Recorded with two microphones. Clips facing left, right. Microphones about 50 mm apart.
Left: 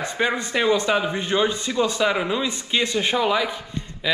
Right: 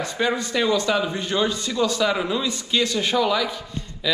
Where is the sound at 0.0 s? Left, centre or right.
Left.